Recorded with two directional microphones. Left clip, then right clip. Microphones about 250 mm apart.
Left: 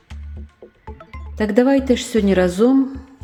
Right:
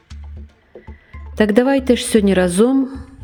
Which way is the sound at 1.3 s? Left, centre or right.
Right.